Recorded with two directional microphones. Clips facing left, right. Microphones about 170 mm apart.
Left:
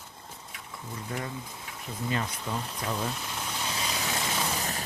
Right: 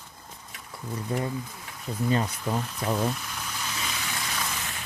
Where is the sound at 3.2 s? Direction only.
25° left (ahead or behind); by 4.8 s 40° left (ahead or behind).